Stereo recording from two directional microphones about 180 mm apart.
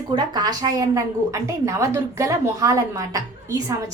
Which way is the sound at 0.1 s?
25° right (ahead or behind).